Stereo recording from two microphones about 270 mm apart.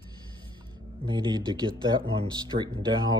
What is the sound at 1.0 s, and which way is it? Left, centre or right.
Speech, centre.